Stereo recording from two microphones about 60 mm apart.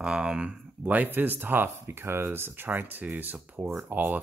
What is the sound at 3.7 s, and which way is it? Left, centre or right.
Speech, right.